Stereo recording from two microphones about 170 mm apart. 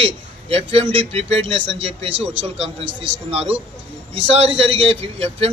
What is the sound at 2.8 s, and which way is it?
Speech, 90° right.